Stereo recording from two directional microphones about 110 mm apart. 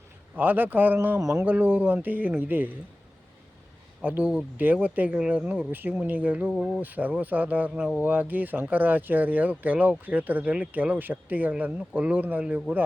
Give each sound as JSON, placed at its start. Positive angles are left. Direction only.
{"t": 0.3, "sound": "speech", "side_deg": -15}
{"t": 4.0, "sound": "speech", "side_deg": -15}